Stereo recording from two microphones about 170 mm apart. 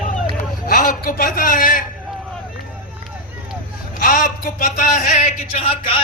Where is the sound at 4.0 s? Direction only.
55° left (ahead or behind); by 6.0 s 30° left (ahead or behind).